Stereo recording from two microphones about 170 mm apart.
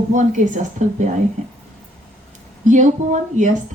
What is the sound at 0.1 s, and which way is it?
Speech, 45° right (ahead or behind).